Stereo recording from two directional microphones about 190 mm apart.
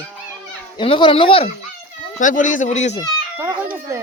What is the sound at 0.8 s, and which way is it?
Speech, 25° left (ahead or behind).